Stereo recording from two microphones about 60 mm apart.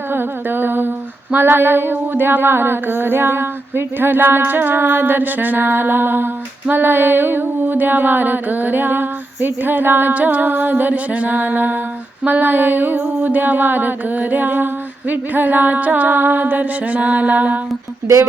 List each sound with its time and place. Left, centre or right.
0.1 s humming: right
12.2 s music: right